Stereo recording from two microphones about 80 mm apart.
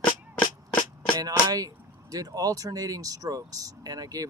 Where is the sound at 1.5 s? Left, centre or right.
Right.